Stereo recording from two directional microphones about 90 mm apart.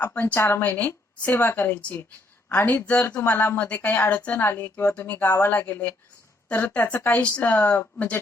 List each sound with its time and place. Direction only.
0.0 s speech: 20° left (ahead or behind)